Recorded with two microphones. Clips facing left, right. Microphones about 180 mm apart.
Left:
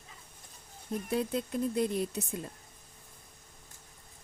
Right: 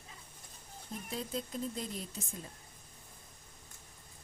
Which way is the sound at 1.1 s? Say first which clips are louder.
Left 7 dB; 65° left (ahead or behind).